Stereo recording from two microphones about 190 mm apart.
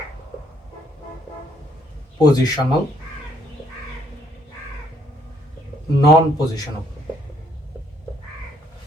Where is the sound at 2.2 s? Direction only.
20° left (ahead or behind).